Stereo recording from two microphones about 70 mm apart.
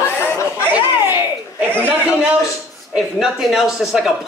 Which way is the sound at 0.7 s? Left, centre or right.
Right.